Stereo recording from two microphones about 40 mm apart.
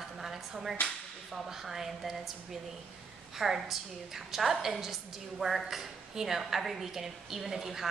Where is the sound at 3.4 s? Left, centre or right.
Centre.